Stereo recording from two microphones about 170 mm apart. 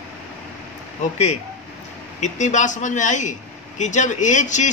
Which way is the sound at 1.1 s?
40° left (ahead or behind).